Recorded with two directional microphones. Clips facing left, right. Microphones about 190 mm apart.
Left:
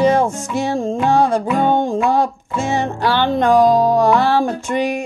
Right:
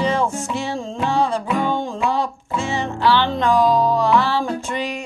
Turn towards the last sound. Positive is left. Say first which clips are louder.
# left 5 dB
turn(degrees=50)  # may be behind; listen again after turning